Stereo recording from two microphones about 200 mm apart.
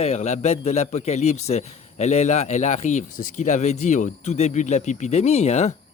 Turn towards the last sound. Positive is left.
turn(degrees=35)  # may be behind; listen again after turning